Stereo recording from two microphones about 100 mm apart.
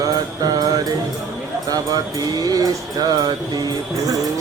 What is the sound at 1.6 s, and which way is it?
Music, 40° right (ahead or behind).